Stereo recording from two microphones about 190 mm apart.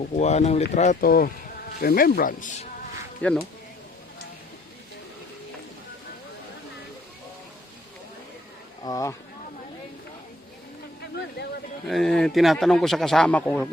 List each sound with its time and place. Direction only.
0.2 s speech: 35° left (ahead or behind)
1.0 s speech: 50° left (ahead or behind)
3.2 s speech: 5° left (ahead or behind)
8.8 s speech: 20° left (ahead or behind)
11.1 s a sound: 60° left (ahead or behind)
11.9 s a man's voice: centre (ahead or behind)